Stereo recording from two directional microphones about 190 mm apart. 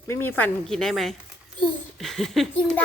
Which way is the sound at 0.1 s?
10° left (ahead or behind).